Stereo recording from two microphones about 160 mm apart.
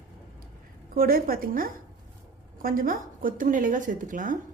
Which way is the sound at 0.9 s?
65° right (ahead or behind).